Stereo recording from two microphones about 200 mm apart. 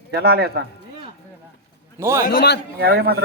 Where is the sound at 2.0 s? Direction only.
15° right (ahead or behind).